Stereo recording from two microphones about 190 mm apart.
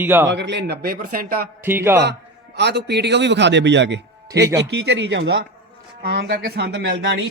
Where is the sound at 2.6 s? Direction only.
60° right (ahead or behind).